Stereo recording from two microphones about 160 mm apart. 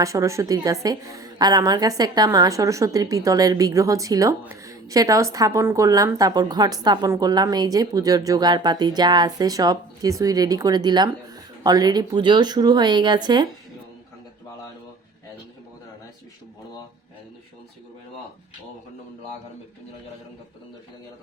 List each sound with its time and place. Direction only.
0.0 s a woman's voice: 20° right (ahead or behind)